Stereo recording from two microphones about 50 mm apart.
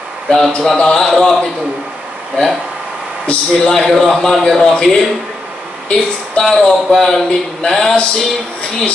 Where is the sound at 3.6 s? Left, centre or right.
Centre.